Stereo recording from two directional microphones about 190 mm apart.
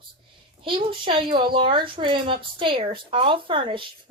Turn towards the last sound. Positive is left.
turn(degrees=-25)  # may be behind; listen again after turning